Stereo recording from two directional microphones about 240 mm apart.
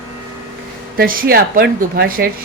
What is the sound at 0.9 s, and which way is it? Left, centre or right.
A woman's voice, right.